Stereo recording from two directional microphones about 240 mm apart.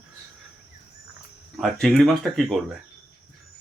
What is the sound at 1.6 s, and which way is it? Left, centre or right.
Speech, centre.